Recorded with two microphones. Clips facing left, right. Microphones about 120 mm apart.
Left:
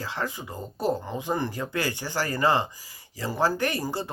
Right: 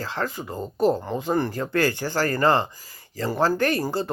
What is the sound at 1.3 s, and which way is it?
Speech, 50° right (ahead or behind).